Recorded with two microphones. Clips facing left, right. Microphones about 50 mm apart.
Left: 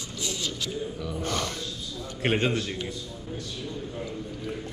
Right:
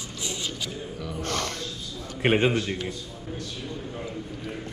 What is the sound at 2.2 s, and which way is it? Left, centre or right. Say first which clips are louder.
Speech: right 4 dB; centre.